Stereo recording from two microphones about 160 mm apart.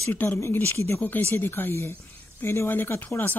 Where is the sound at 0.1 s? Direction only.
10° left (ahead or behind).